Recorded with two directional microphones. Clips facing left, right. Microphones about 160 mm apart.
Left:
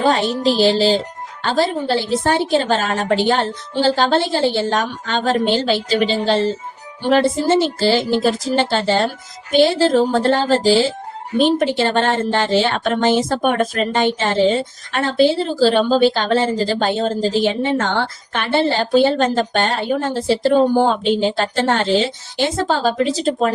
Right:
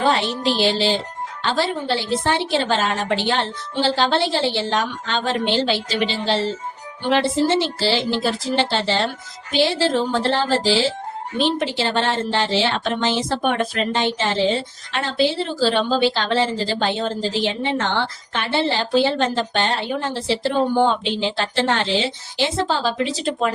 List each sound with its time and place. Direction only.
0.0 s a woman's voice: 45° left (ahead or behind)